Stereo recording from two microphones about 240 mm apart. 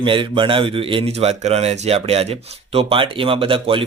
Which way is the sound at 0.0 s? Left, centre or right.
Right.